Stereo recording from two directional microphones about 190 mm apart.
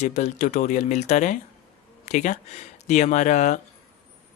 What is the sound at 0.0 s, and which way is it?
Speech, 40° left (ahead or behind).